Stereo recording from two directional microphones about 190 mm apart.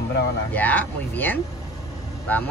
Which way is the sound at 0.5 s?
10° left (ahead or behind).